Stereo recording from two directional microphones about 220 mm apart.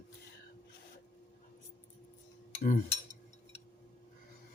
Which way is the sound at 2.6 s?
35° left (ahead or behind).